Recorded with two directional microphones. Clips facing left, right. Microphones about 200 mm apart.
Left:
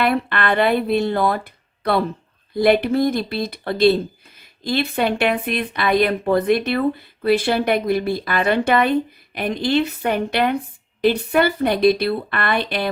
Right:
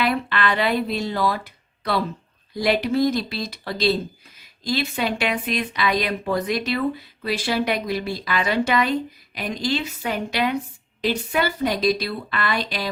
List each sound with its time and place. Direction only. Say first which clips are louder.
0.0 s speech: left 3 dB; 55° left (ahead or behind)